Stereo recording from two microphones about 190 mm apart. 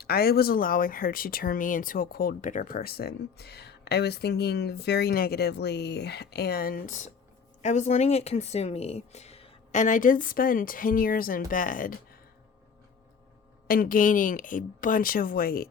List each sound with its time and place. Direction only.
0.0 s speech: 55° left (ahead or behind)
13.7 s speech: 50° left (ahead or behind)